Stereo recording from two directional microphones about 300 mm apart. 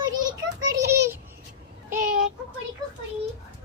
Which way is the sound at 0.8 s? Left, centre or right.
Right.